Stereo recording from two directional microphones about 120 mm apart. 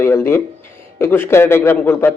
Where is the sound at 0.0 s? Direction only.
20° left (ahead or behind).